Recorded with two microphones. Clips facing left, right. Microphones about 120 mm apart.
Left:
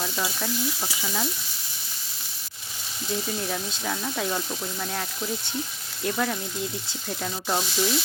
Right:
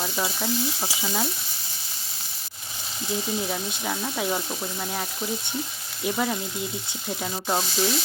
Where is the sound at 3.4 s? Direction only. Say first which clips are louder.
Right 1 dB; 15° right (ahead or behind).